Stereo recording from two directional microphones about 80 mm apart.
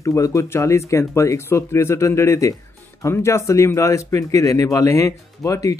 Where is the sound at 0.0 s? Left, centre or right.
Left.